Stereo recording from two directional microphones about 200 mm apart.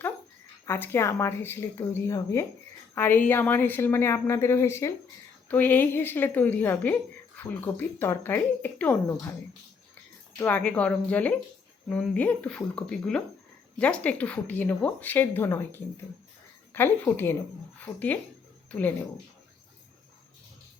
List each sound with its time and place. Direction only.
0.6 s a woman's voice: 10° left (ahead or behind)
10.3 s a woman's voice: 5° left (ahead or behind)